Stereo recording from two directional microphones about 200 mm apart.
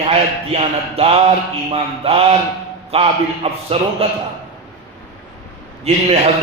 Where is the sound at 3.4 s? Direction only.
30° right (ahead or behind).